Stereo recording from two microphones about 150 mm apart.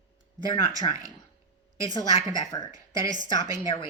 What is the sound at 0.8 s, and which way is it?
Speech, 30° left (ahead or behind).